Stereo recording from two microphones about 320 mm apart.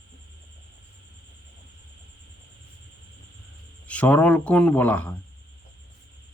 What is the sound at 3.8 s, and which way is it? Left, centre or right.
Speech, centre.